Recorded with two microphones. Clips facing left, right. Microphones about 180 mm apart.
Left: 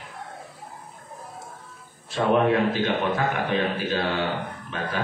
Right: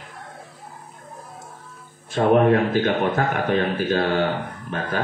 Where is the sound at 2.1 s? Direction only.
50° right (ahead or behind).